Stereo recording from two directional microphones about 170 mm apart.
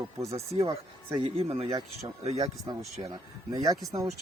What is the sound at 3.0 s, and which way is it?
Speech, 20° right (ahead or behind).